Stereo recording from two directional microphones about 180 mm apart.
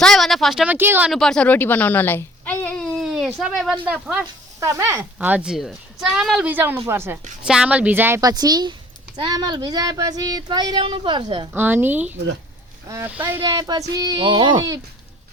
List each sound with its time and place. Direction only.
0.0 s speech: centre (ahead or behind)
1.1 s a woman's voice: 5° left (ahead or behind)
4.6 s a woman's voice: 15° right (ahead or behind)
11.5 s a woman's voice: 10° right (ahead or behind)
13.4 s speech: 20° right (ahead or behind)